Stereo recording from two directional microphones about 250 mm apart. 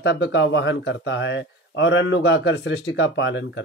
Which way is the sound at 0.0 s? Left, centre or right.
Left.